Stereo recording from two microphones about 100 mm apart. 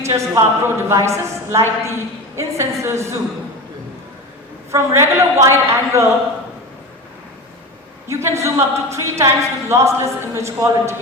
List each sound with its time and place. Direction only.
0.0 s a woman's voice: 30° right (ahead or behind)
4.7 s a woman's voice: 30° right (ahead or behind)
8.0 s a woman's voice: 30° right (ahead or behind)